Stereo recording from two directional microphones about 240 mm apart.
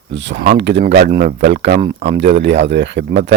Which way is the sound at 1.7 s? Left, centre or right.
Right.